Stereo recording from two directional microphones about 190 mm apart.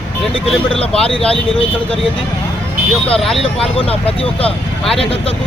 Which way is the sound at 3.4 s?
30° left (ahead or behind).